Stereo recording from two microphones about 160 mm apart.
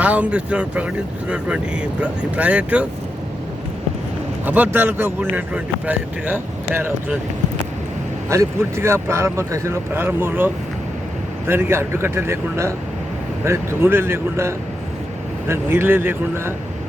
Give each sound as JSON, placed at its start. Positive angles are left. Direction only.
{"t": 0.0, "sound": "speech", "side_deg": -10}
{"t": 4.4, "sound": "speech", "side_deg": -10}
{"t": 8.3, "sound": "speech", "side_deg": -15}